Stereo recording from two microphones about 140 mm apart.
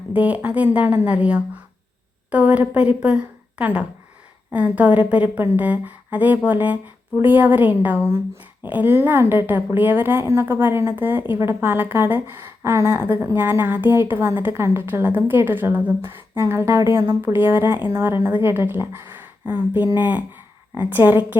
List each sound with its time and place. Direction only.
0.1 s a woman's voice: 10° right (ahead or behind)